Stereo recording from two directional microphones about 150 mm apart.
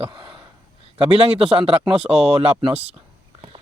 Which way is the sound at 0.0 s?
35° right (ahead or behind).